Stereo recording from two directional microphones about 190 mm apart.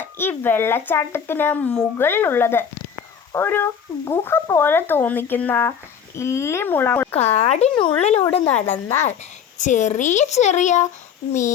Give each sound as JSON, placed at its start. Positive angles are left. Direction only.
{"t": 0.0, "sound": "speech", "side_deg": 10}
{"t": 7.2, "sound": "speech", "side_deg": 35}